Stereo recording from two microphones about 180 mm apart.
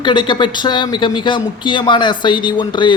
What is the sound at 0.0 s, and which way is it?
A man's voice, 25° left (ahead or behind).